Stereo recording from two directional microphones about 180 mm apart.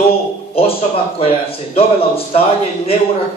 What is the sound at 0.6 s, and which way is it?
A man's voice, 35° left (ahead or behind).